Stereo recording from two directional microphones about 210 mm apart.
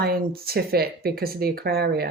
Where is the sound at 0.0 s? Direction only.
45° right (ahead or behind).